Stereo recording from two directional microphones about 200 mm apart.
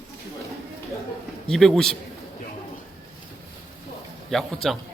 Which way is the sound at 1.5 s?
Centre (ahead or behind).